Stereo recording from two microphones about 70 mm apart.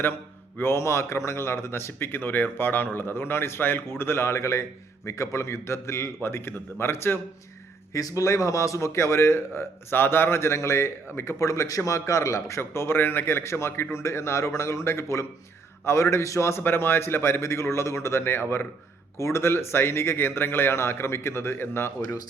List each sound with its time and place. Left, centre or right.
0.6 s a man's voice: left
7.9 s a man's voice: left